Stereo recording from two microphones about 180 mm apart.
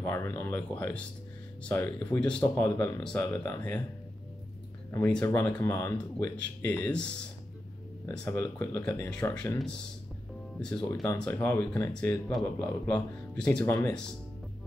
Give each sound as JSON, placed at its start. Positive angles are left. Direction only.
{"t": 0.0, "sound": "speech", "side_deg": 15}
{"t": 4.9, "sound": "speech", "side_deg": 15}
{"t": 8.1, "sound": "speech", "side_deg": 15}